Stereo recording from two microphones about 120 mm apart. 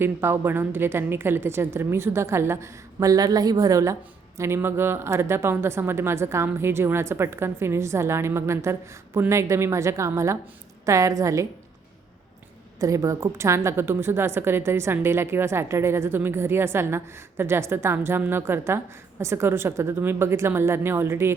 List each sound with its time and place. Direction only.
0.0 s a woman's voice: 20° right (ahead or behind)
12.8 s a woman's voice: 25° right (ahead or behind)